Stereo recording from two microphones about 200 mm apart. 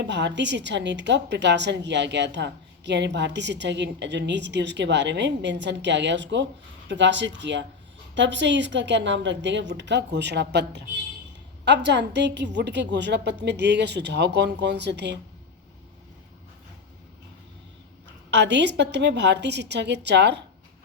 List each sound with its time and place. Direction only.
0.0 s a woman's voice: 60° right (ahead or behind)
18.3 s a woman's voice: 60° right (ahead or behind)